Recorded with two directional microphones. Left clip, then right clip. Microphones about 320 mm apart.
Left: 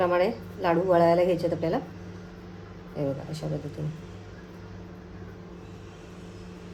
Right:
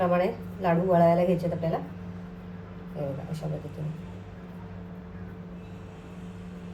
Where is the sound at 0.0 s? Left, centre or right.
Left.